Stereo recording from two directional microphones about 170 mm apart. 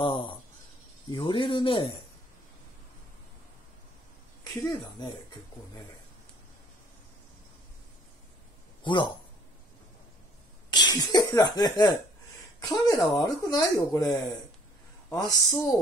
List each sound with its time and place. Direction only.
0.0 s speech: 30° left (ahead or behind)
8.8 s a man's voice: 30° left (ahead or behind)
10.7 s speech: 25° left (ahead or behind)